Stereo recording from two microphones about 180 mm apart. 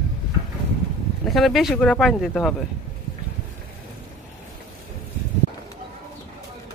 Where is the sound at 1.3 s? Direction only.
Centre (ahead or behind).